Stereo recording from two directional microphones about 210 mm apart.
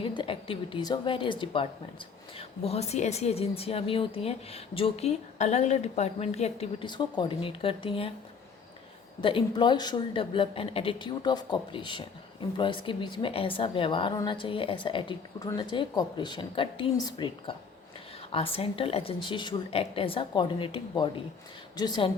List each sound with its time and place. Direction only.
0.0 s speech: 25° left (ahead or behind)
9.2 s speech: 25° left (ahead or behind)